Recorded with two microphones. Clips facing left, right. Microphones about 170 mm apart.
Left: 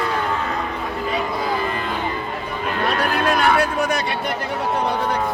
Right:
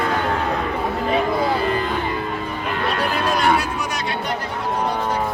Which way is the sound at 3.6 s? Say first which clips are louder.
Left 5 dB; 55° left (ahead or behind).